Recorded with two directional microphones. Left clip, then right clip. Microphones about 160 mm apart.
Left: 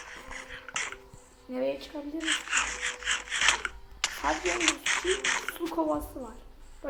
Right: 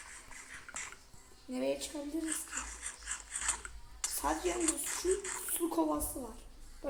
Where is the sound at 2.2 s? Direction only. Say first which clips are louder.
Left 13 dB; 50° left (ahead or behind).